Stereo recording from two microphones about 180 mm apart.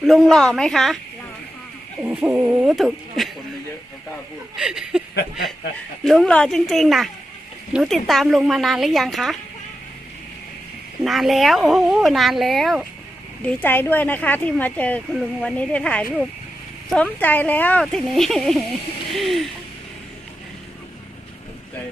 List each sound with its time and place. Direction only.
0.0 s speech: centre (ahead or behind)
2.0 s speech: 5° right (ahead or behind)
4.5 s speech: 5° right (ahead or behind)
6.1 s speech: 5° left (ahead or behind)
11.0 s speech: centre (ahead or behind)